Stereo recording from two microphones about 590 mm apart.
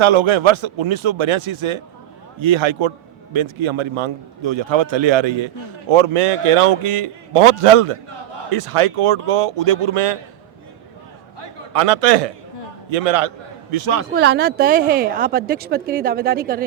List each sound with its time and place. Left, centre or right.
0.0 s a man's voice: right
5.9 s a man's voice: right
11.3 s a sound: right
12.9 s a man's voice: right
14.0 s speech: centre